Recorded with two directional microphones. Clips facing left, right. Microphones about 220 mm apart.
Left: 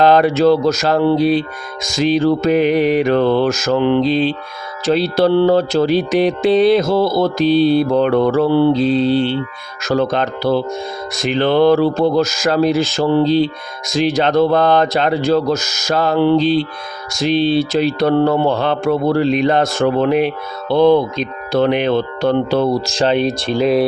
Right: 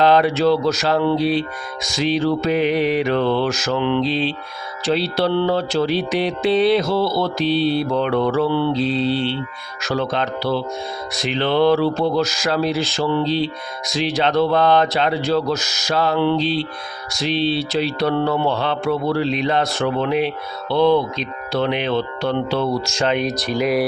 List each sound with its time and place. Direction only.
0.0 s mantra: 45° left (ahead or behind); by 23.8 s 25° left (ahead or behind)